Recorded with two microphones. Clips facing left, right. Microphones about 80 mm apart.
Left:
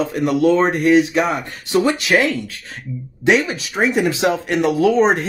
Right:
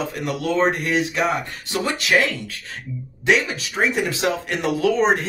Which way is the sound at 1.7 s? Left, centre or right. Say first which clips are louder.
Left 9 dB; left.